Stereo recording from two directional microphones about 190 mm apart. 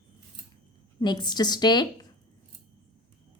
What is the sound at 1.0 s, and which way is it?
A woman's voice, 20° left (ahead or behind).